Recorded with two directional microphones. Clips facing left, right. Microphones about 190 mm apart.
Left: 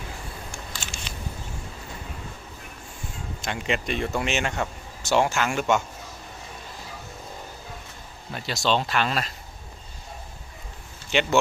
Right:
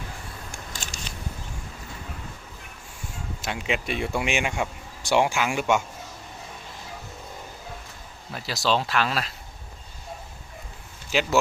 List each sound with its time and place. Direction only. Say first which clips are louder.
0.7 s a sound: even; 40° right (ahead or behind)
3.4 s speech: left 1 dB; 5° right (ahead or behind)
8.3 s speech: even; centre (ahead or behind)
11.1 s speech: left 1 dB; centre (ahead or behind)